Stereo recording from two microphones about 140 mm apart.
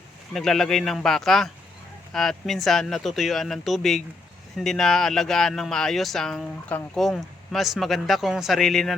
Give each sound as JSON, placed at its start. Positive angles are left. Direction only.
{"t": 0.3, "sound": "speech", "side_deg": 5}